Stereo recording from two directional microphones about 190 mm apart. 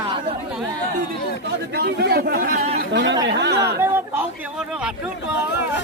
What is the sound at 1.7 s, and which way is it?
Speech, 60° right (ahead or behind).